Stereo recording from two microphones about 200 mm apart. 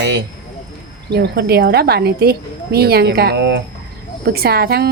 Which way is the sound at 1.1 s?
55° right (ahead or behind).